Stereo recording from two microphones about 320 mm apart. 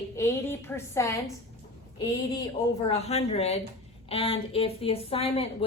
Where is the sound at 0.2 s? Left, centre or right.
Centre.